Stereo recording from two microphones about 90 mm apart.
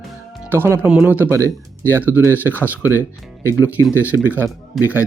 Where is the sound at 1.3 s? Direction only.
35° right (ahead or behind).